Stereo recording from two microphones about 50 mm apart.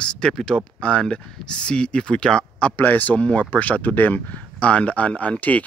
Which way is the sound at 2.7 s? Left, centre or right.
Left.